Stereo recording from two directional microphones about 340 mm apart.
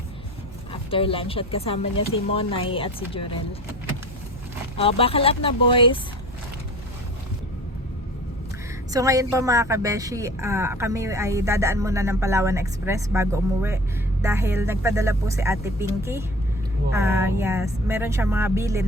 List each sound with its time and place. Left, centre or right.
0.7 s speech: centre
4.8 s speech: centre
8.9 s a woman's voice: centre